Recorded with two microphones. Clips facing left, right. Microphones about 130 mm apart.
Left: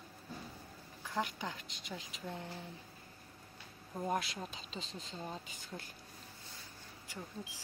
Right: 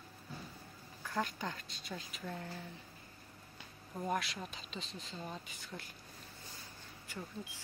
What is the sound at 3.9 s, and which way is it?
A woman's voice, 20° left (ahead or behind).